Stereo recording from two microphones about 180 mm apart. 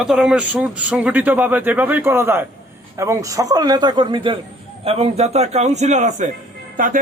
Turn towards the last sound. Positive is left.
turn(degrees=-50)  # may be behind; listen again after turning